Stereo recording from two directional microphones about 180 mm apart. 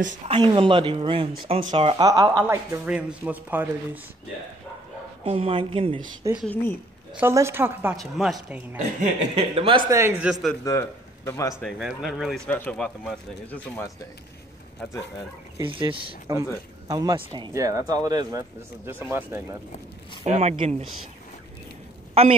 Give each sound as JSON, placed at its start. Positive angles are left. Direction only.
{"t": 0.3, "sound": "speech", "side_deg": -25}
{"t": 5.2, "sound": "speech", "side_deg": -30}
{"t": 6.4, "sound": "speech", "side_deg": 10}
{"t": 7.2, "sound": "speech", "side_deg": -15}
{"t": 7.9, "sound": "speech", "side_deg": 0}
{"t": 9.0, "sound": "speech", "side_deg": -30}
{"t": 9.9, "sound": "speech", "side_deg": -10}
{"t": 10.6, "sound": "speech", "side_deg": 15}
{"t": 11.6, "sound": "speech", "side_deg": 0}
{"t": 15.6, "sound": "speech", "side_deg": -30}
{"t": 16.3, "sound": "speech", "side_deg": -15}
{"t": 20.2, "sound": "speech", "side_deg": -35}
{"t": 22.2, "sound": "speech", "side_deg": -35}